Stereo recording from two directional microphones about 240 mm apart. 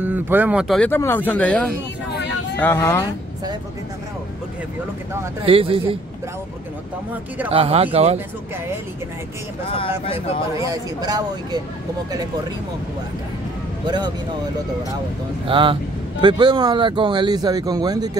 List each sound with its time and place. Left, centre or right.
0.0 s speech: centre
5.4 s speech: right
7.5 s speech: right
9.8 s speech: left
10.6 s speech: centre
13.8 s speech: centre
15.4 s speech: right